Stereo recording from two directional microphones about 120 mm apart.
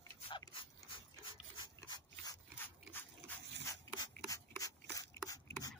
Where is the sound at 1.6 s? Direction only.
35° left (ahead or behind).